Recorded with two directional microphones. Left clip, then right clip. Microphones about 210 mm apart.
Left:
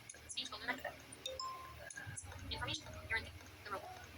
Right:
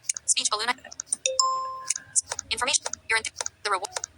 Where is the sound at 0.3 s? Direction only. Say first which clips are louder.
Right 15 dB; 55° right (ahead or behind).